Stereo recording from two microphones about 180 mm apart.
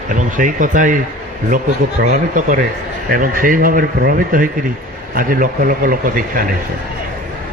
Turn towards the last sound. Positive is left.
turn(degrees=-50)  # may be behind; listen again after turning